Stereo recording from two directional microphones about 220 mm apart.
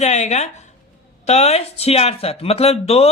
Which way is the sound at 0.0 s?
30° left (ahead or behind).